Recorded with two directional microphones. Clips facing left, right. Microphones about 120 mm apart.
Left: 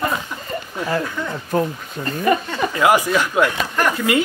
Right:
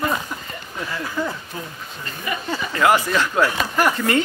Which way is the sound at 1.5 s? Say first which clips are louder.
Left 12 dB; 50° left (ahead or behind).